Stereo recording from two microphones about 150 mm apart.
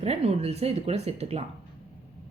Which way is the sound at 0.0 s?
45° right (ahead or behind).